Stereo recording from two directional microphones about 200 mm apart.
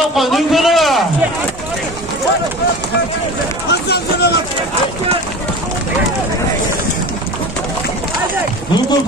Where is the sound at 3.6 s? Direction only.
55° left (ahead or behind).